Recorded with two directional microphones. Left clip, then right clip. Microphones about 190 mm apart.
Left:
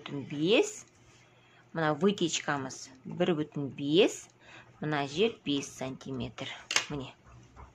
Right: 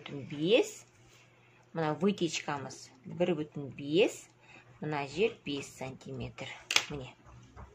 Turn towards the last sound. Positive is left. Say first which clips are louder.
# right 1 dB
turn(degrees=20)  # may be behind; listen again after turning